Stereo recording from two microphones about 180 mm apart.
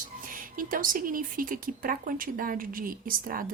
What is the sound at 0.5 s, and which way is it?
Speech, 50° right (ahead or behind).